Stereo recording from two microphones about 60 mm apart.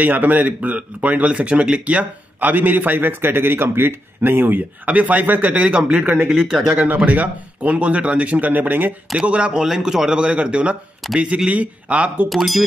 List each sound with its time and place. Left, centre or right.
0.0 s speech: right
2.5 s a man's voice: right
5.5 s speech: centre
6.3 s speech: centre
7.1 s speech: right
9.1 s speech: centre
12.3 s speech: centre